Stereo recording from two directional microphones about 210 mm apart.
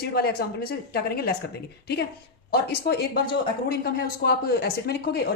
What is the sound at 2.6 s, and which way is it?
Speech, 50° left (ahead or behind).